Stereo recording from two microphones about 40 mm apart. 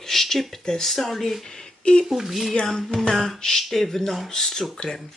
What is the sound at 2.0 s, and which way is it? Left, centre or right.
Speech, centre.